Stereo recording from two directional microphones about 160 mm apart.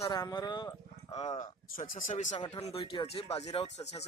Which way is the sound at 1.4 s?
60° left (ahead or behind).